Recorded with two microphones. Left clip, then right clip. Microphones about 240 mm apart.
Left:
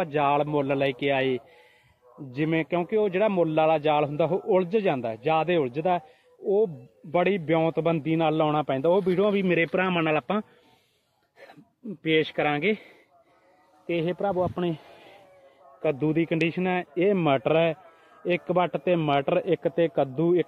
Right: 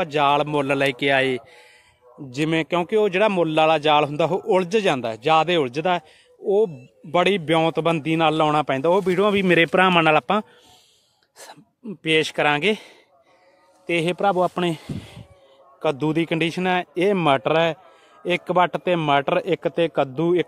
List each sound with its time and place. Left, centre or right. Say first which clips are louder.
0.0 s a man's voice: right 5 dB; centre
12.0 s a man's voice: right 4 dB; centre
13.8 s a man's voice: right 6 dB; right